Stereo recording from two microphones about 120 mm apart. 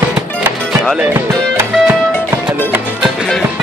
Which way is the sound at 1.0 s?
20° right (ahead or behind).